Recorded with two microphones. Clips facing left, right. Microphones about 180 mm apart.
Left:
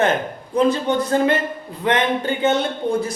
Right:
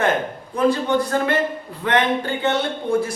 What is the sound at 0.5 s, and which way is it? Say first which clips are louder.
Speech: left 1 dB; 20° left (ahead or behind).